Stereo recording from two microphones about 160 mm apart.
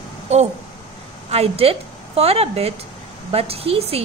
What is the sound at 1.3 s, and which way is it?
A woman's voice, 40° right (ahead or behind).